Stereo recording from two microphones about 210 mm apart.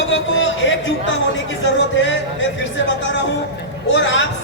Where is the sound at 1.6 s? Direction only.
60° left (ahead or behind).